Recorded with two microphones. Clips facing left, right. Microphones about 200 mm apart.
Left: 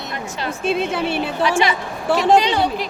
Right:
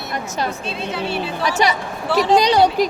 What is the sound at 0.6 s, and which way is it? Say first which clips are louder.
Speech: left 5 dB; 50° left (ahead or behind).